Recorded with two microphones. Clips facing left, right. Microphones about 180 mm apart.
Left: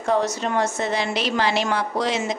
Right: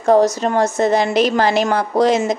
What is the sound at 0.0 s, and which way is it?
A woman's voice, 40° right (ahead or behind).